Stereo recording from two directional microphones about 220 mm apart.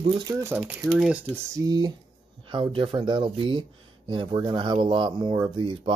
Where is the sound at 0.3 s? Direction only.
15° right (ahead or behind).